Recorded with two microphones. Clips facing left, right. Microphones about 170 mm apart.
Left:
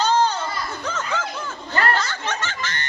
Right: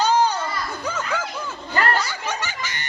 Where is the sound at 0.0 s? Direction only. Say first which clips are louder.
Right 1 dB; 15° right (ahead or behind).